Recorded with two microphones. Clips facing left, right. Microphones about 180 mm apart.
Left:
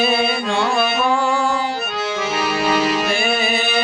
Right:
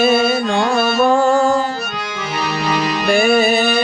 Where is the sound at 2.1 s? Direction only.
5° left (ahead or behind).